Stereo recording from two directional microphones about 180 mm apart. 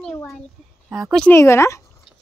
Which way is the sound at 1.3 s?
15° left (ahead or behind).